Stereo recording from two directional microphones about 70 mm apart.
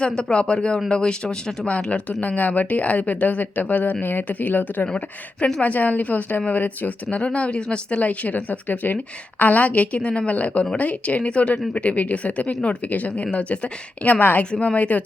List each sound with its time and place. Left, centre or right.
0.2 s a woman's voice: centre